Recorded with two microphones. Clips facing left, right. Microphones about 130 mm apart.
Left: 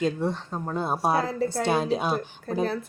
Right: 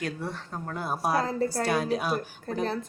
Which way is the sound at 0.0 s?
20° left (ahead or behind).